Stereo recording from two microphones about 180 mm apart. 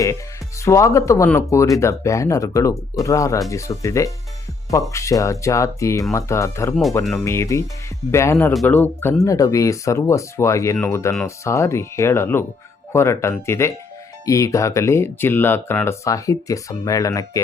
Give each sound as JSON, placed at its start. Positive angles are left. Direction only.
{"t": 0.6, "sound": "speech", "side_deg": 15}